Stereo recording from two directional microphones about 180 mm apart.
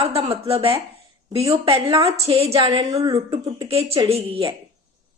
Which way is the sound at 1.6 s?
30° right (ahead or behind).